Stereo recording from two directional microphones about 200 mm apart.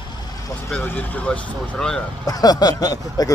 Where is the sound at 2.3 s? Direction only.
20° left (ahead or behind).